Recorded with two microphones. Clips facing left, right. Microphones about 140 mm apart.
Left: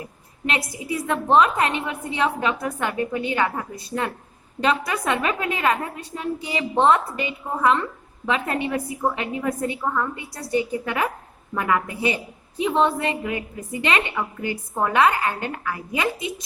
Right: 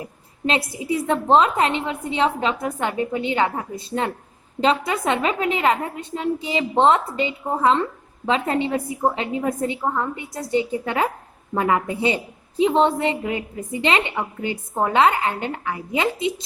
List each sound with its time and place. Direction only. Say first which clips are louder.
0.0 s a woman's voice: right 4 dB; 25° right (ahead or behind)